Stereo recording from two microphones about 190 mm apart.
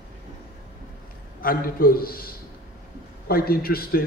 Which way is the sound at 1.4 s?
50° left (ahead or behind).